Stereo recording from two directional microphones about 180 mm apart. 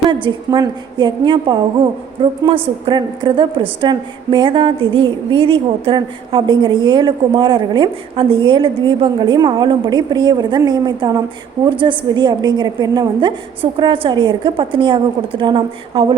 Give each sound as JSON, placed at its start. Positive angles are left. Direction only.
{"t": 0.1, "sound": "a woman's voice", "side_deg": -25}